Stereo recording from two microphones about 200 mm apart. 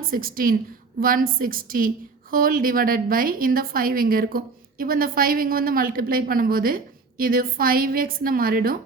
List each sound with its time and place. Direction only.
0.0 s a woman's voice: 45° right (ahead or behind)